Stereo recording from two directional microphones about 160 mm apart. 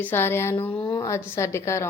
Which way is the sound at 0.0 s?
15° left (ahead or behind).